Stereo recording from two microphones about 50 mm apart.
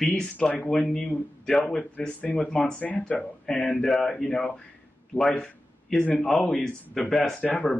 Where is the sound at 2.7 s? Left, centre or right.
Left.